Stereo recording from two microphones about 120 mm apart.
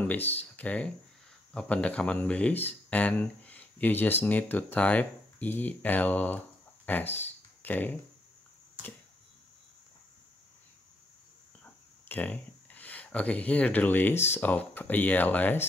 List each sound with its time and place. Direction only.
0.0 s speech: 15° left (ahead or behind)
11.6 s speech: 15° left (ahead or behind)